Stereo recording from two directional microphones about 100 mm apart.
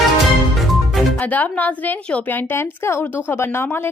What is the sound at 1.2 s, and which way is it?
A woman's voice, 15° left (ahead or behind).